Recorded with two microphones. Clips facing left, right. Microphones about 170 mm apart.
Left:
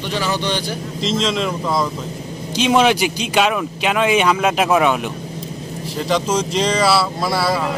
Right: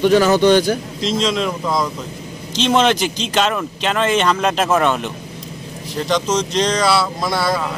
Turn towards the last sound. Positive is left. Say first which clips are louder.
# even
turn(degrees=5)  # may be behind; listen again after turning